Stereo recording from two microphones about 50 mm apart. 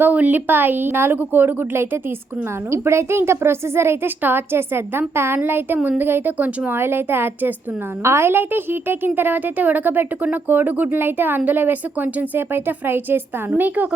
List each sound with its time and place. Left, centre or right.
0.0 s a woman's voice: right
2.6 s a woman's voice: right
4.2 s a woman's voice: right
8.0 s a woman's voice: right